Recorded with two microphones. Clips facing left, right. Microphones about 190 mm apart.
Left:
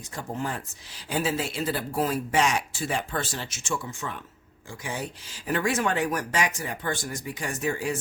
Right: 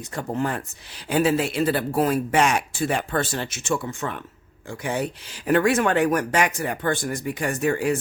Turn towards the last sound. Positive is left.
turn(degrees=-60)  # may be behind; listen again after turning